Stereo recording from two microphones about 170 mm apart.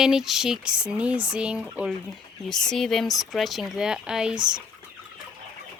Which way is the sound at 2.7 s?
Centre (ahead or behind).